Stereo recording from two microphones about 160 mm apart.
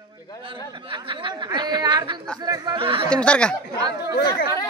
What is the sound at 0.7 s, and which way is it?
Speech, 30° right (ahead or behind).